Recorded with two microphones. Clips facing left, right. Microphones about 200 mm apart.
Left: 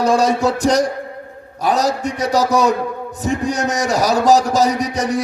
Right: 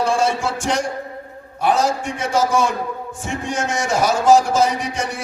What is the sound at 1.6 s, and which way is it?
A man's voice, 40° left (ahead or behind).